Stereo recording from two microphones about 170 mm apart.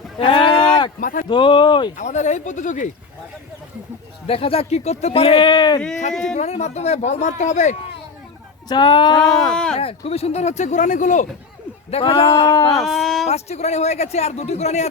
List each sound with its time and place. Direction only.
0.2 s a sound: 30° left (ahead or behind)
0.9 s speech: 55° left (ahead or behind)
1.3 s speech: 30° left (ahead or behind)
2.0 s speech: 45° left (ahead or behind)
4.3 s speech: 35° left (ahead or behind)
6.3 s speech: 40° left (ahead or behind)
8.7 s speech: 25° left (ahead or behind)
9.5 s speech: 5° left (ahead or behind)
9.7 s speech: 35° left (ahead or behind)
11.9 s speech: 35° left (ahead or behind)
12.7 s speech: centre (ahead or behind)
13.2 s speech: 40° left (ahead or behind)